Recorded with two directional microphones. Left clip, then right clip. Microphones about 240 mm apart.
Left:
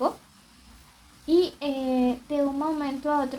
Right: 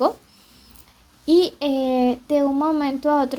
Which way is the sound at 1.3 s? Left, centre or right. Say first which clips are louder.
Right 6 dB; right.